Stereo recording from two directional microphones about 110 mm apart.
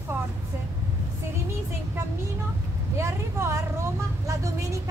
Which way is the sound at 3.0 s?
25° right (ahead or behind).